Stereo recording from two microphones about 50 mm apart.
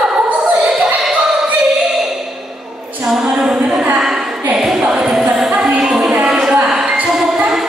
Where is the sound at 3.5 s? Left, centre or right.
Centre.